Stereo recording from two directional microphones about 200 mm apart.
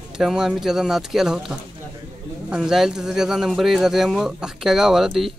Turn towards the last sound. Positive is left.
turn(degrees=0)  # may be behind; listen again after turning